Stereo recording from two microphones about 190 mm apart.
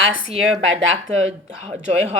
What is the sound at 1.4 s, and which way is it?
Speech, 35° right (ahead or behind).